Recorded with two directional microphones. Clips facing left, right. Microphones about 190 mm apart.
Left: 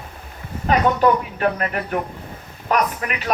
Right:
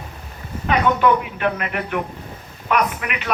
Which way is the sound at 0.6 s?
35° left (ahead or behind).